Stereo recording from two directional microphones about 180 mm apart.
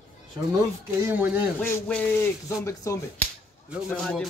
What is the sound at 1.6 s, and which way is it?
A man's voice, 5° left (ahead or behind).